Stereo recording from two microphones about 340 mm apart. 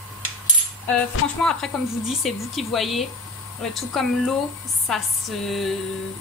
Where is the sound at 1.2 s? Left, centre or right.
Left.